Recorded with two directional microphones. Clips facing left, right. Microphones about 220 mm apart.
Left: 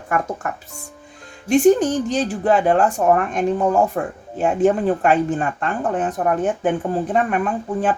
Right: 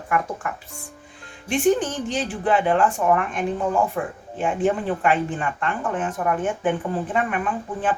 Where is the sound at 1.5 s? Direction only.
40° left (ahead or behind).